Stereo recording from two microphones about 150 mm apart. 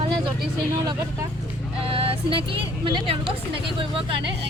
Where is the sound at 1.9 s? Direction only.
35° right (ahead or behind).